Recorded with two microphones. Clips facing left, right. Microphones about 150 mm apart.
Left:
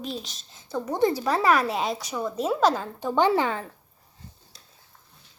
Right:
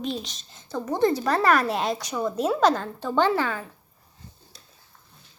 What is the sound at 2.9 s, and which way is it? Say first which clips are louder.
Speech: left 1 dB; 15° left (ahead or behind).